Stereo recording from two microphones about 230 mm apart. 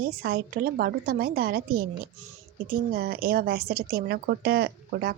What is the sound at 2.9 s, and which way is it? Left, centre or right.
A woman's voice, right.